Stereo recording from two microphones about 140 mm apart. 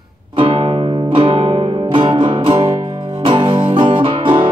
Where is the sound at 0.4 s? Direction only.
35° right (ahead or behind).